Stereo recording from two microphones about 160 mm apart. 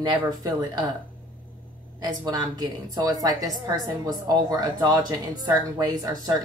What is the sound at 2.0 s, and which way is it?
A woman's voice, 25° right (ahead or behind).